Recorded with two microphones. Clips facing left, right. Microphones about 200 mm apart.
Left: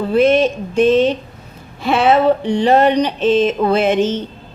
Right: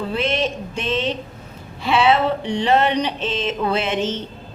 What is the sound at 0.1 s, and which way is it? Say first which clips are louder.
Speech: left 12 dB; 45° left (ahead or behind).